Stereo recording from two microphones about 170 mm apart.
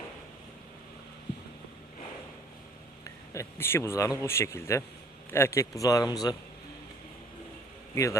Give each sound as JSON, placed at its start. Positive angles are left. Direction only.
{"t": 3.3, "sound": "speech", "side_deg": 15}
{"t": 7.9, "sound": "speech", "side_deg": 20}